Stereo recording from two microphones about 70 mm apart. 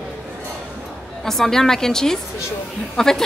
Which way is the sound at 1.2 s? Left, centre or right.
Centre.